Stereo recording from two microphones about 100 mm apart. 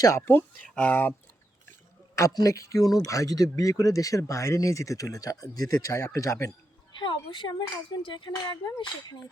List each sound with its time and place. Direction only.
0.2 s speech: 20° left (ahead or behind)
2.1 s speech: 30° left (ahead or behind)
7.0 s speech: 50° left (ahead or behind)